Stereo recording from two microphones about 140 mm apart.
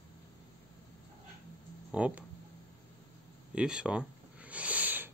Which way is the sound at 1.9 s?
10° right (ahead or behind).